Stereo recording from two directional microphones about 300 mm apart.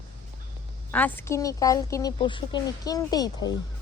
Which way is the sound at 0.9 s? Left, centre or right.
Centre.